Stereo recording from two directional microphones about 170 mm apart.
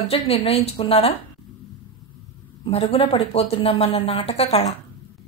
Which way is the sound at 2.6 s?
35° left (ahead or behind).